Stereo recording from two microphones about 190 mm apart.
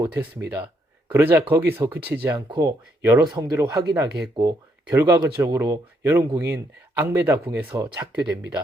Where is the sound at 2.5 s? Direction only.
20° right (ahead or behind).